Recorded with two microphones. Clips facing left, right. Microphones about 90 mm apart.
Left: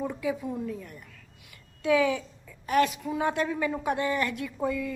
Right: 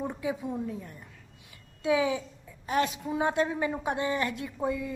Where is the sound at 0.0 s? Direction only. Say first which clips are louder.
Left 2 dB; 25° right (ahead or behind).